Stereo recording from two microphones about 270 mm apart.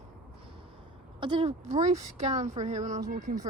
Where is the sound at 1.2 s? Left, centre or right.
Centre.